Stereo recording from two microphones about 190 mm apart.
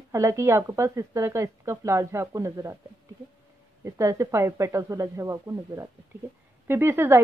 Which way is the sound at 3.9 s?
15° right (ahead or behind).